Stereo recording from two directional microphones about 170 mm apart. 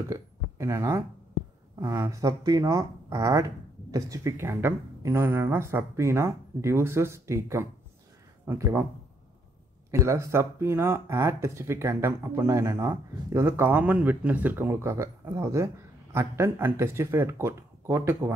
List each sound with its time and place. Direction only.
0.1 s speech: 15° right (ahead or behind)
9.8 s speech: 15° right (ahead or behind)